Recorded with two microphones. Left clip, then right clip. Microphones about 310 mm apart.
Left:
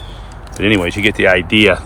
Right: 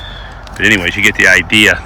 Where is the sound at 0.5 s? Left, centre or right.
Centre.